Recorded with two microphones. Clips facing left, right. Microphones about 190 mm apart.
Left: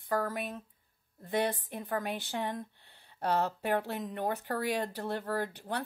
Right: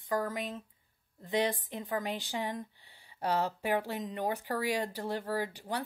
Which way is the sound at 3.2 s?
10° right (ahead or behind).